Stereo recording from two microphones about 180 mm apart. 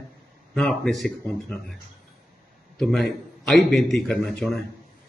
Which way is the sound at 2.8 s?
Centre (ahead or behind).